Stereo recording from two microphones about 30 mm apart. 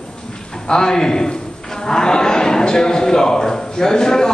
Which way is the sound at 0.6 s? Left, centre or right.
Left.